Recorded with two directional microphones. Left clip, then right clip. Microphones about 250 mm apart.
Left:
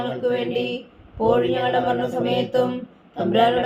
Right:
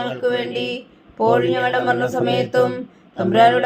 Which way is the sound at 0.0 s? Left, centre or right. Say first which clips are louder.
Right 2 dB; right.